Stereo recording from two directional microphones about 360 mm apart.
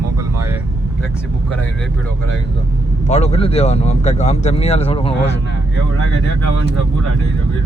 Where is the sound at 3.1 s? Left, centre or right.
Centre.